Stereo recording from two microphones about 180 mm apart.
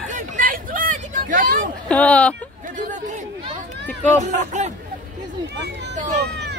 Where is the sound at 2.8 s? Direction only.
45° right (ahead or behind).